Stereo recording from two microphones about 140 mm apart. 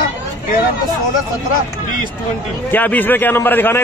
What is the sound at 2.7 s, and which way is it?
A man's voice, 15° left (ahead or behind).